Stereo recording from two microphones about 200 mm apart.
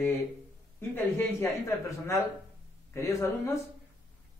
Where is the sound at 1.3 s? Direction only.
15° left (ahead or behind).